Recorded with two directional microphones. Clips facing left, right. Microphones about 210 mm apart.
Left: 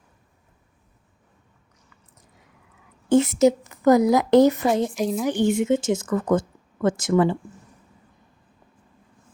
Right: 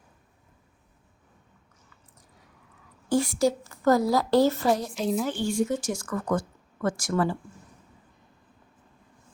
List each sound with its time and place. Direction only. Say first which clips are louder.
3.1 s a woman's voice: left 7 dB; 20° left (ahead or behind)